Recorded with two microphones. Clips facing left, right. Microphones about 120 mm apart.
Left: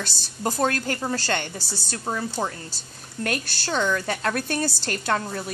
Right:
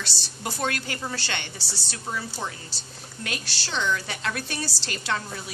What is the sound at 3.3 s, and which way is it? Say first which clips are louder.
A woman's voice: left 7 dB; 50° left (ahead or behind).